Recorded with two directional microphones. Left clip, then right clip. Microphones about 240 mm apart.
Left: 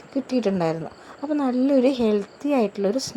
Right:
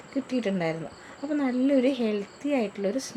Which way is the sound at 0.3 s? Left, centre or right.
Centre.